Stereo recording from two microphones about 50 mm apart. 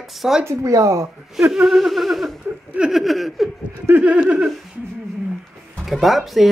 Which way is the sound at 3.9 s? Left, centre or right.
Right.